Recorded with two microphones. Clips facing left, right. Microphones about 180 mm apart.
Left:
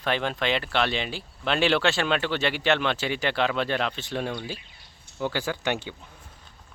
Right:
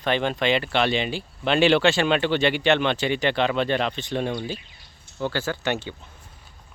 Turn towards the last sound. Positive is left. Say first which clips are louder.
# right 2 dB
turn(degrees=10)  # may be behind; listen again after turning